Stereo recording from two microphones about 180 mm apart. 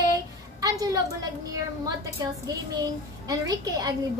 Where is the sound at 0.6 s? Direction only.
20° right (ahead or behind).